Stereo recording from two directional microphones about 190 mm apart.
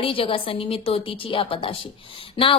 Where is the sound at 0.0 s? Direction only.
30° left (ahead or behind).